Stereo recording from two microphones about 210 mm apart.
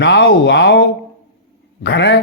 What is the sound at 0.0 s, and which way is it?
Speech, 55° left (ahead or behind).